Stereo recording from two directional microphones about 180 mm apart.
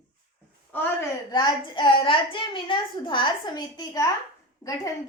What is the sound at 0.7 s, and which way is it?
Speech, 10° left (ahead or behind).